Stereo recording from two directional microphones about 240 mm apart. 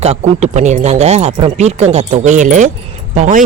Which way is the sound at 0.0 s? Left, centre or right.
Right.